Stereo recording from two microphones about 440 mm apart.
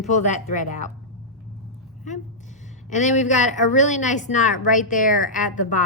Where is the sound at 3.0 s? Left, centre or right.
Centre.